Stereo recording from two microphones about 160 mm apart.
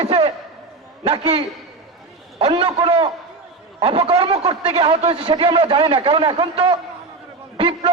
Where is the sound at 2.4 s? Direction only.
35° right (ahead or behind).